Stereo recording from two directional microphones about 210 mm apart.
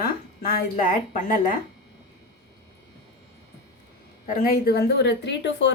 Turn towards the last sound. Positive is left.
turn(degrees=55)  # may be behind; listen again after turning